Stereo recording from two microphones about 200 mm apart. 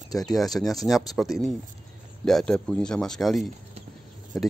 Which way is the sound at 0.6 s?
Centre (ahead or behind).